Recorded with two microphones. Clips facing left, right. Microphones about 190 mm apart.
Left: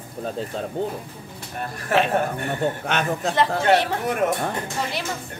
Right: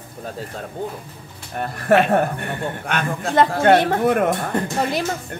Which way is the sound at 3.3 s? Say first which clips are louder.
Right 5 dB; 50° right (ahead or behind).